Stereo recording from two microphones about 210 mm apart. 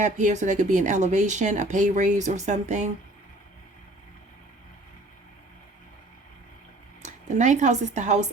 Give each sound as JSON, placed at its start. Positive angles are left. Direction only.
{"t": 0.0, "sound": "speech", "side_deg": -35}
{"t": 7.0, "sound": "speech", "side_deg": -35}